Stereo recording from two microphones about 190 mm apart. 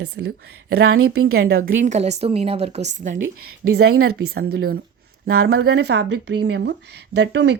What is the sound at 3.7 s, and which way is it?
Speech, 75° right (ahead or behind).